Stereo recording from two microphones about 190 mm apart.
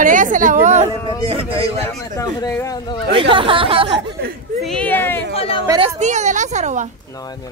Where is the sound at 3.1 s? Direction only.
25° right (ahead or behind).